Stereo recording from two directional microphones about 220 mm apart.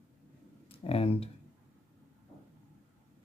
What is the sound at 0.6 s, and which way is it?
Speech, 25° left (ahead or behind).